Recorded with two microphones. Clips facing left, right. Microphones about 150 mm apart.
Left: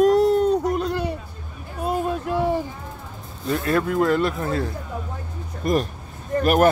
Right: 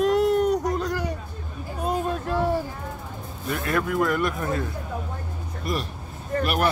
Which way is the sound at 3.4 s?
30° left (ahead or behind).